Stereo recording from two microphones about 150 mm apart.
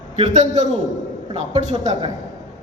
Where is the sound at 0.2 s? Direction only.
55° right (ahead or behind).